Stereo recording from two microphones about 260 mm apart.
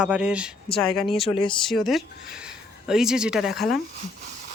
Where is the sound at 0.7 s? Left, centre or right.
Centre.